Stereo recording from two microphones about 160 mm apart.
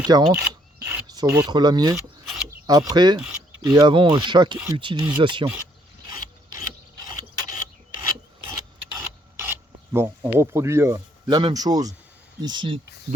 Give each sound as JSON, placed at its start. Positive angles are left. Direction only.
{"t": 0.1, "sound": "speech", "side_deg": -25}
{"t": 0.4, "sound": "rub", "side_deg": -10}
{"t": 1.0, "sound": "speech", "side_deg": -25}
{"t": 7.0, "sound": "filing", "side_deg": -25}
{"t": 9.4, "sound": "filing", "side_deg": -15}
{"t": 10.3, "sound": "speech", "side_deg": -15}
{"t": 11.3, "sound": "speech", "side_deg": -30}